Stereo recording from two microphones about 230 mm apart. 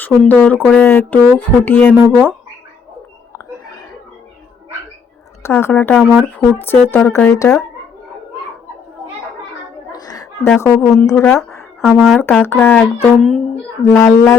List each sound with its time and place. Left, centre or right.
0.1 s speech: centre
2.0 s speech: centre
5.4 s a woman's voice: centre
9.9 s a sound: centre
10.5 s speech: centre